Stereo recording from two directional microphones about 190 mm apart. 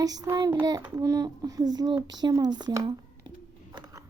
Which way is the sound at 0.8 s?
10° right (ahead or behind).